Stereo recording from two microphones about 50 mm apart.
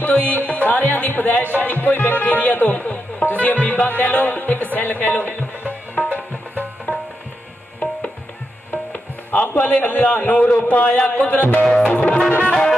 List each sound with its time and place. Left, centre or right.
0.0 s music: left
8.9 s music: left
9.6 s a sound: left
10.6 s music: left
11.6 s music: centre
12.0 s music: left